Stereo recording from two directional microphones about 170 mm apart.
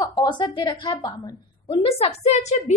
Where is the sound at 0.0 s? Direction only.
25° left (ahead or behind).